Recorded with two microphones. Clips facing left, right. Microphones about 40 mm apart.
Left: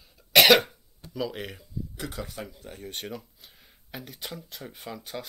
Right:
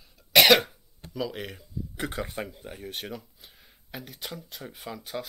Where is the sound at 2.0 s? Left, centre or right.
Right.